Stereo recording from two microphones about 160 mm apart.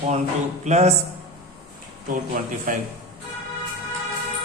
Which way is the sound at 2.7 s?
55° right (ahead or behind).